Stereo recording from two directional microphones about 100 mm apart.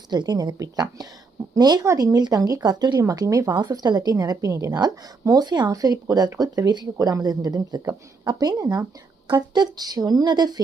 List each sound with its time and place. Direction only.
0.1 s speech: 45° right (ahead or behind)
1.8 s speech: 30° right (ahead or behind)
3.0 s speech: 35° right (ahead or behind)
3.5 s speech: 45° right (ahead or behind)